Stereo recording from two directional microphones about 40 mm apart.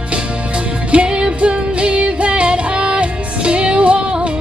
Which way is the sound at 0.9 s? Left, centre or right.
Right.